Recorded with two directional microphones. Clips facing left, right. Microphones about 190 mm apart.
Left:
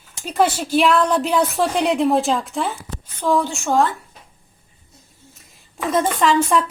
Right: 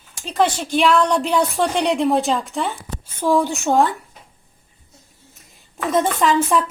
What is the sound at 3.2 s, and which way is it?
Speech, 15° right (ahead or behind).